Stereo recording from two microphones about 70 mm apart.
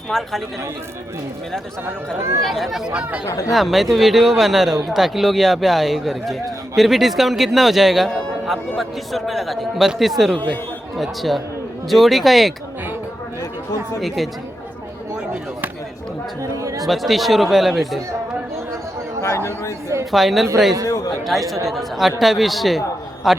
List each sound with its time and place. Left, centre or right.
0.1 s a man's voice: centre
2.1 s speech: right
2.4 s a man's voice: centre
2.9 s speech: centre
3.2 s a man's voice: left
3.5 s a man's voice: centre
16.4 s speech: right
16.8 s a man's voice: centre
20.1 s a man's voice: centre
20.8 s a man's voice: left
21.7 s a man's voice: centre